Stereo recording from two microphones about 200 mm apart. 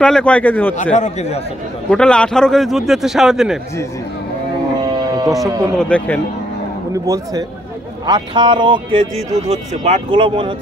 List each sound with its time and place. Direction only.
0.0 s a man's voice: 5° left (ahead or behind)
0.9 s speech: 35° left (ahead or behind)
1.9 s a man's voice: 5° left (ahead or behind)
4.9 s music: 20° right (ahead or behind)
5.8 s a man's voice: 5° left (ahead or behind)
6.9 s a man's voice: 15° right (ahead or behind)